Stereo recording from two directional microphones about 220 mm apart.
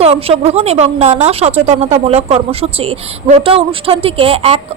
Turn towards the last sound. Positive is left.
turn(degrees=-25)  # may be behind; listen again after turning